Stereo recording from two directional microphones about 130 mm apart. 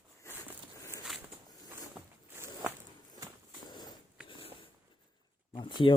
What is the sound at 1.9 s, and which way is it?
Walk, 15° right (ahead or behind).